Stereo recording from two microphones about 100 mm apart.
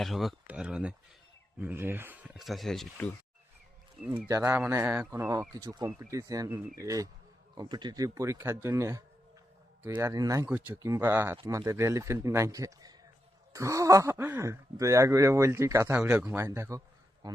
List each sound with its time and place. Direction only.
0.0 s speech: centre (ahead or behind); by 2.3 s 20° right (ahead or behind)
2.4 s speech: centre (ahead or behind)
4.3 s speech: 25° right (ahead or behind)
16.0 s speech: 10° right (ahead or behind)
16.2 s speech: 25° right (ahead or behind)